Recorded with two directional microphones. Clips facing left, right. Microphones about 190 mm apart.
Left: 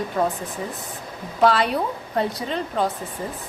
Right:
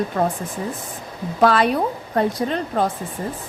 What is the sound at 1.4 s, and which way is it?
Speech, 50° right (ahead or behind).